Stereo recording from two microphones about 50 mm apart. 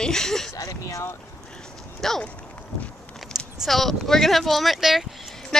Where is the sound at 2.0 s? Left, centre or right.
Centre.